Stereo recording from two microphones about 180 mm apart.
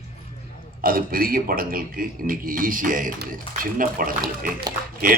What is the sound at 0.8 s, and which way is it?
A man's voice, 55° right (ahead or behind).